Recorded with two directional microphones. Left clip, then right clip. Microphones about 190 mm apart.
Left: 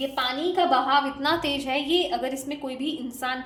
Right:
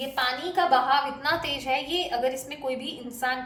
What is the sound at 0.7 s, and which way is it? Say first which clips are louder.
A woman's voice: right 1 dB; 40° left (ahead or behind).